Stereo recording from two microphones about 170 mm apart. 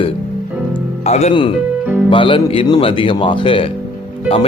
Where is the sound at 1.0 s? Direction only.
40° left (ahead or behind).